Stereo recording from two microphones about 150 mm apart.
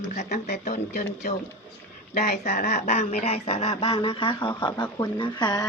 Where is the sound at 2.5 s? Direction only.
55° left (ahead or behind).